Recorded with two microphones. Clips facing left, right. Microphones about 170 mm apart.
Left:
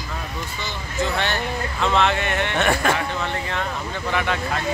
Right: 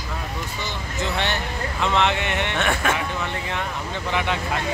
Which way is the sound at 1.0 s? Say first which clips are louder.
Left 2 dB; 20° right (ahead or behind).